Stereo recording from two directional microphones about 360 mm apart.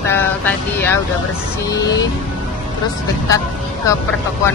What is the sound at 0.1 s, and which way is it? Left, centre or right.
Vehicle, centre.